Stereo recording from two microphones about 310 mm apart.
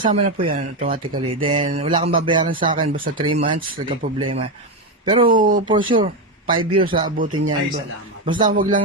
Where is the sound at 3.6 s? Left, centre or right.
Right.